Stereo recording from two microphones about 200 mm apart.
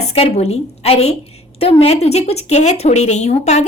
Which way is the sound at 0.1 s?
30° left (ahead or behind).